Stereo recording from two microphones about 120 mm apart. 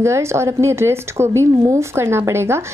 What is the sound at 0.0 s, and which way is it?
Speech, 25° right (ahead or behind).